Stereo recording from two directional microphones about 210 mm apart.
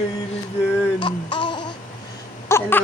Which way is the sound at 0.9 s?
20° left (ahead or behind).